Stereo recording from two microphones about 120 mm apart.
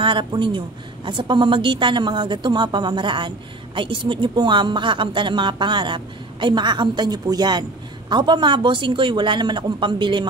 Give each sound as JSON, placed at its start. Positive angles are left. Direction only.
{"t": 0.0, "sound": "a woman's voice", "side_deg": -45}